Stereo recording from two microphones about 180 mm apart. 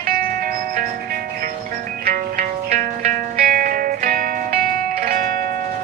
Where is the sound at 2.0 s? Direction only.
60° right (ahead or behind).